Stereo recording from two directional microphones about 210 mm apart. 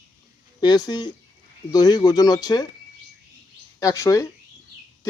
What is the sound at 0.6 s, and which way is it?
Speech, 20° left (ahead or behind).